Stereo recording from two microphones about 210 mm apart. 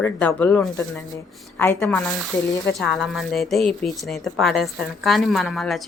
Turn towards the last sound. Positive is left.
turn(degrees=0)  # may be behind; listen again after turning